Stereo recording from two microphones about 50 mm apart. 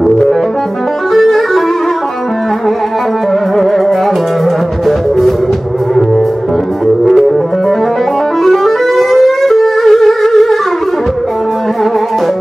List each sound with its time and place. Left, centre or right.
0.0 s music: centre
4.8 s music: centre
8.5 s music: centre